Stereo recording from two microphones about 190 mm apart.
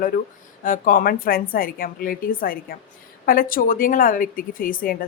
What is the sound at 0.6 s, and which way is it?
Speech, 45° left (ahead or behind).